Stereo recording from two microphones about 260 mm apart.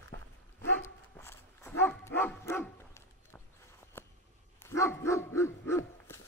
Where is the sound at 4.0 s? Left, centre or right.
Centre.